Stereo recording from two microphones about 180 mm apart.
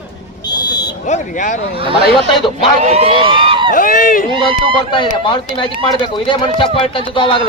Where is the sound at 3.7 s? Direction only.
50° left (ahead or behind).